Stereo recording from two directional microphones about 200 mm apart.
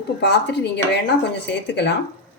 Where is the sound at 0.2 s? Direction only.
55° left (ahead or behind).